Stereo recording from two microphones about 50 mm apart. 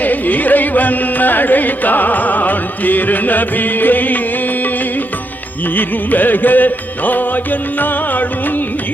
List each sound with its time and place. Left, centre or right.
0.0 s carnatic music: left
5.7 s carnatic music: left